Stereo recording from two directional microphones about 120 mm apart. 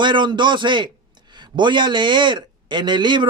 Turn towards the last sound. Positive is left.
turn(degrees=-40)  # may be behind; listen again after turning